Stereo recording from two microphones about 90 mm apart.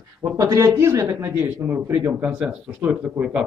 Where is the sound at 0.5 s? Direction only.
35° right (ahead or behind).